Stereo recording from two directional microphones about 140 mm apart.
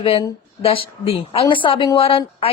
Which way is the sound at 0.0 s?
40° left (ahead or behind).